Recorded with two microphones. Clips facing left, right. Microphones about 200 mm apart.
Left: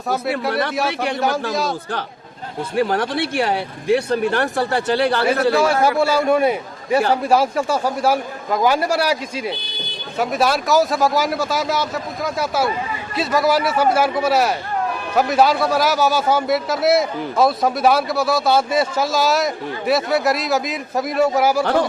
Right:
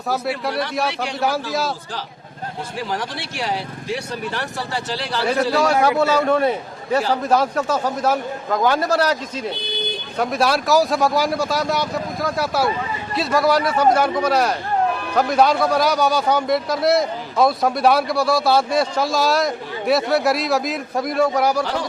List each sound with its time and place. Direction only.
0.1 s a man's voice: centre (ahead or behind)
2.7 s speech: 60° left (ahead or behind)
6.0 s a man's voice: 10° left (ahead or behind)
21.6 s speech: 55° left (ahead or behind)